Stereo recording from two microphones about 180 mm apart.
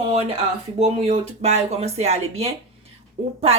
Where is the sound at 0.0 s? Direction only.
35° right (ahead or behind).